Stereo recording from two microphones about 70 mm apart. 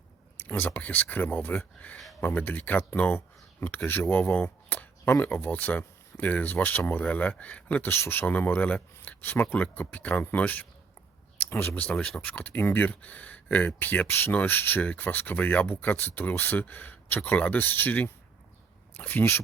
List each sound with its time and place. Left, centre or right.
0.3 s speech: left
7.9 s speech: left
11.3 s a sound: left
11.7 s speech: centre